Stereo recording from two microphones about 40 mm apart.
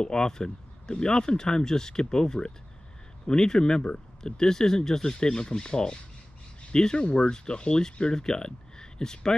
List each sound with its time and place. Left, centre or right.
0.0 s speech: centre